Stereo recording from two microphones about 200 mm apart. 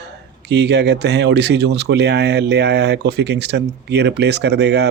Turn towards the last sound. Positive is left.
turn(degrees=-55)  # may be behind; listen again after turning